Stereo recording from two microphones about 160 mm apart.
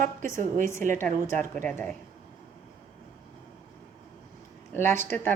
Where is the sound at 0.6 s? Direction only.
15° left (ahead or behind).